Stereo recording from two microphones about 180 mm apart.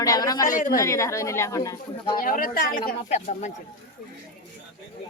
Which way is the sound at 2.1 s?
50° left (ahead or behind).